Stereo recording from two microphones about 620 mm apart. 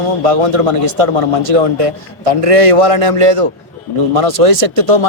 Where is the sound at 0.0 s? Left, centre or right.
Right.